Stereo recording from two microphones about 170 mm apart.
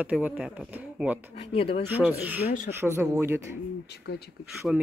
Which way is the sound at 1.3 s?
35° left (ahead or behind).